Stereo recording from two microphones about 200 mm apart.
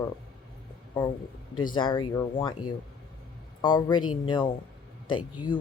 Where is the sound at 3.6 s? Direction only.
20° left (ahead or behind).